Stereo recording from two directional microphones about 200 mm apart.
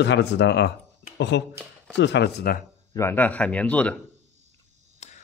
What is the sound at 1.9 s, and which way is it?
Speech, 60° left (ahead or behind).